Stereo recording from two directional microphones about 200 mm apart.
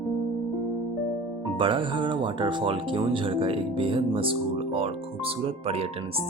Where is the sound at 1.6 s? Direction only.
25° right (ahead or behind).